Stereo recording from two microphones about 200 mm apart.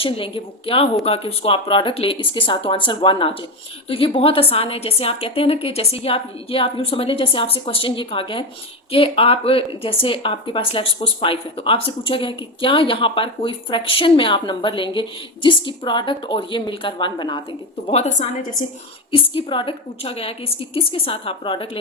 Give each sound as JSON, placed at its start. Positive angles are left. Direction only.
{"t": 0.0, "sound": "a woman's voice", "side_deg": 25}